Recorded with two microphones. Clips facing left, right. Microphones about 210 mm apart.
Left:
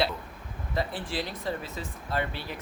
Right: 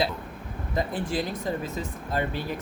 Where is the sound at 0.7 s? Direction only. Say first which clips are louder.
Right 4 dB; 45° right (ahead or behind).